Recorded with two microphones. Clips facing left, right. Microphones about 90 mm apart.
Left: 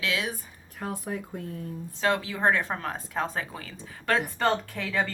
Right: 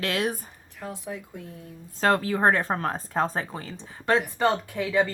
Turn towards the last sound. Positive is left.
turn(degrees=-15)  # may be behind; listen again after turning